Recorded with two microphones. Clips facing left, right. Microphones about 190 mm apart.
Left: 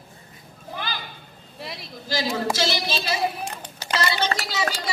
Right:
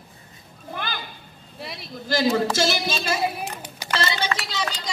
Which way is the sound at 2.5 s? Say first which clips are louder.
Right 2 dB; 45° right (ahead or behind).